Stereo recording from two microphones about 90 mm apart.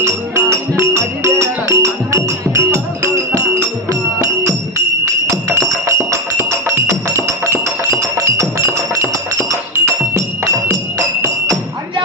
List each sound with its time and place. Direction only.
0.0 s music: 35° right (ahead or behind)
5.0 s music: 35° right (ahead or behind)